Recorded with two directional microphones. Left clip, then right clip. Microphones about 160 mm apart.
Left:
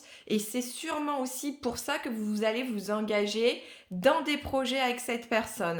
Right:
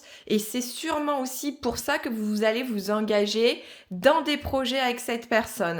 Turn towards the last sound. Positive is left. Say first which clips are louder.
# right 5 dB
turn(degrees=-25)  # may be behind; listen again after turning